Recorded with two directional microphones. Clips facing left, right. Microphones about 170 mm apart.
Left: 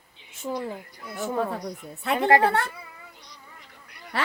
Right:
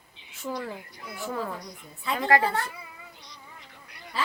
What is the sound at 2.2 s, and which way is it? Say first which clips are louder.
Speech: left 3 dB; 25° left (ahead or behind).